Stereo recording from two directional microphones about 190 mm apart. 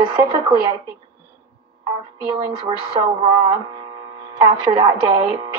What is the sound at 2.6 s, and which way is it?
Speech, 25° right (ahead or behind).